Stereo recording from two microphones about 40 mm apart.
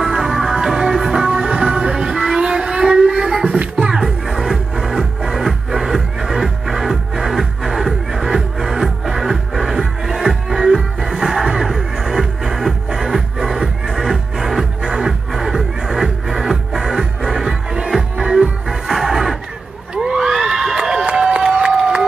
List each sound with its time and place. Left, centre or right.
0.0 s music: centre
1.2 s music: centre
3.5 s music: right
3.9 s music: centre
14.9 s music: centre
20.0 s crowd: centre
21.0 s a sound: right
21.5 s crowd: right